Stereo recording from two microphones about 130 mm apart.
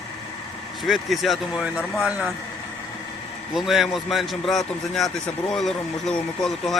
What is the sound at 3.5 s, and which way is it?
A man's voice, centre (ahead or behind).